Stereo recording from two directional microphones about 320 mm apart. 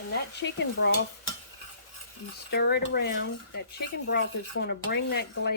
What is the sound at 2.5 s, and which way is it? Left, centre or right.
Speech, left.